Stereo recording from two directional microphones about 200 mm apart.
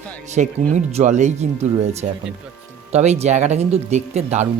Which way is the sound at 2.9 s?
35° right (ahead or behind).